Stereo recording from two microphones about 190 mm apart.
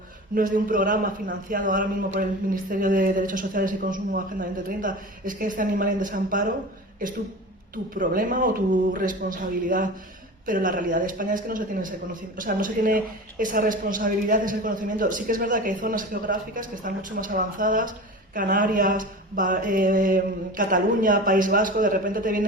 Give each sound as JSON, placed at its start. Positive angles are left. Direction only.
{"t": 0.3, "sound": "speech", "side_deg": -45}